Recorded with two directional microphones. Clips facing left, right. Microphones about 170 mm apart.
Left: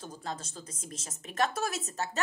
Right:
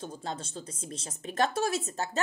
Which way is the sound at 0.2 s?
30° right (ahead or behind).